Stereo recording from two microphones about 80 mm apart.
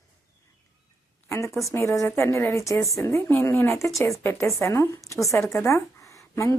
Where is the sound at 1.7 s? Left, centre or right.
Left.